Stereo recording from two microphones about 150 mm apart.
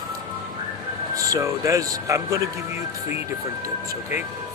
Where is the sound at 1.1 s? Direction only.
20° right (ahead or behind).